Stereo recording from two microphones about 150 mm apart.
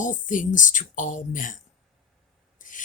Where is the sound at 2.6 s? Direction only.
60° left (ahead or behind).